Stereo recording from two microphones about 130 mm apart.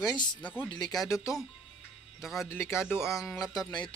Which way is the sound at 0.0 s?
25° left (ahead or behind).